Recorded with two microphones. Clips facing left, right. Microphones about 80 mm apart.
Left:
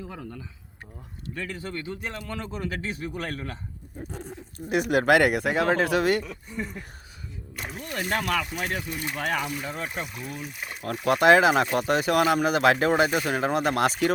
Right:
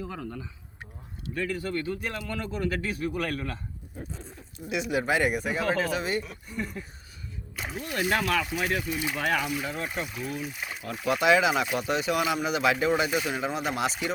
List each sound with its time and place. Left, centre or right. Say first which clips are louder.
1.4 s a man's voice: right 4 dB; left
4.1 s speech: left 5 dB; left
7.6 s speech: right 2 dB; centre
9.2 s speech: even; left
9.8 s speech: right 1 dB; centre
11.0 s speech: left 4 dB; left